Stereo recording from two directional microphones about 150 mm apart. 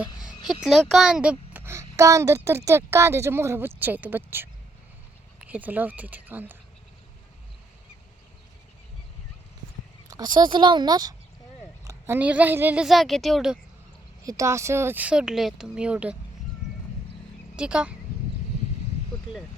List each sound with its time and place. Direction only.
0.0 s a sound: 5° right (ahead or behind)
0.4 s speech: centre (ahead or behind)
10.1 s speech: 25° right (ahead or behind)
11.9 s speech: 15° right (ahead or behind)
14.3 s speech: 20° right (ahead or behind)
17.6 s speech: 5° right (ahead or behind)